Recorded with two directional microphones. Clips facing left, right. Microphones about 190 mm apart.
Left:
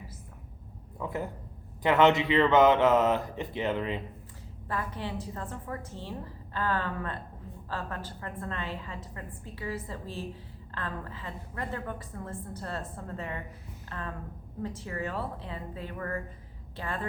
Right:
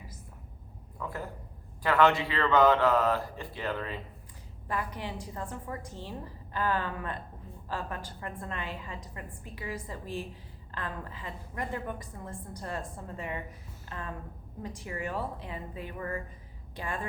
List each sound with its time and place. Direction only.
0.9 s speech: 20° left (ahead or behind)
4.7 s a woman's voice: 15° right (ahead or behind)